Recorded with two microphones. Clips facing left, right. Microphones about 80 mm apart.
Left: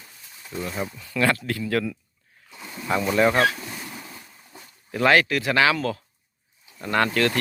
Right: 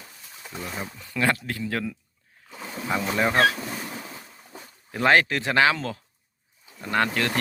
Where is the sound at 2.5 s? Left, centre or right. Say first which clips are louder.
Right 3 dB; right.